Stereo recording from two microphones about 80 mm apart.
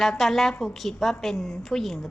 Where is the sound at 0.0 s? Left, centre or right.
Centre.